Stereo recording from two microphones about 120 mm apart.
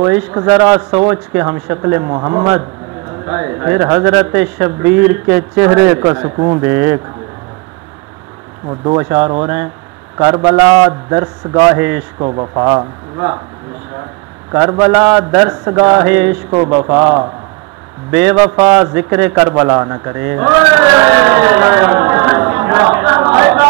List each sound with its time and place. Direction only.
0.0 s a man's voice: 25° right (ahead or behind)
3.3 s a man's voice: 20° right (ahead or behind)
6.6 s a man's voice: 20° right (ahead or behind)
8.9 s a man's voice: 15° right (ahead or behind)
10.1 s a man's voice: 30° right (ahead or behind)
12.2 s a man's voice: 40° right (ahead or behind)
12.6 s a man's voice: 30° right (ahead or behind)
14.5 s a man's voice: 25° right (ahead or behind)
16.4 s a man's voice: 40° right (ahead or behind)
16.9 s a man's voice: 20° right (ahead or behind)